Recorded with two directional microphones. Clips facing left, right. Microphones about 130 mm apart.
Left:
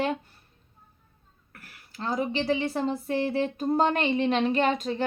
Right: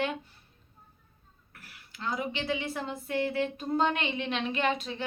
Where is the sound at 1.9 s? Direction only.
35° left (ahead or behind).